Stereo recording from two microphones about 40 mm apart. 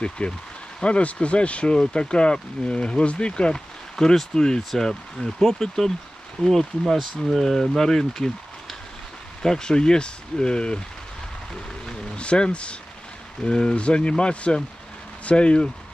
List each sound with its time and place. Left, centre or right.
0.2 s speech: left
3.9 s speech: centre
6.4 s speech: left
6.9 s speech: centre
9.4 s speech: centre
12.2 s speech: left